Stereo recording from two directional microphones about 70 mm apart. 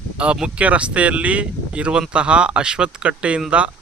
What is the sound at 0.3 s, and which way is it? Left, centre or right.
Speech, centre.